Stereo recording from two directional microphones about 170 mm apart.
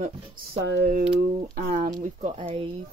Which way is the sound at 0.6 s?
85° right.